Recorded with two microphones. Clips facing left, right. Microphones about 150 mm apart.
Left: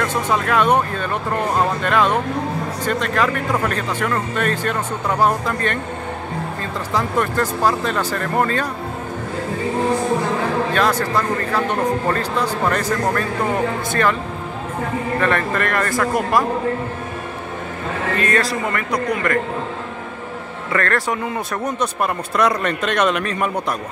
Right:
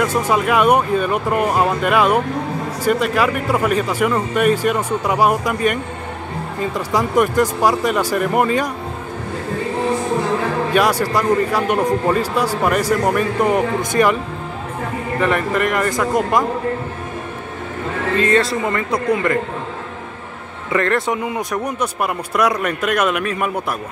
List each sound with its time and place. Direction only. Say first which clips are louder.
0.0 s speech: right 3 dB; 10° right (ahead or behind)
10.7 s speech: right 2 dB; 10° right (ahead or behind)
15.1 s speech: right 3 dB; 15° right (ahead or behind)
18.2 s speech: right 4 dB; 25° right (ahead or behind)
20.7 s speech: right 3 dB; 20° right (ahead or behind)